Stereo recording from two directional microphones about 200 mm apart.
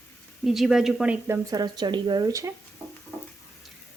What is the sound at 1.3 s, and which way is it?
Speech, 20° right (ahead or behind).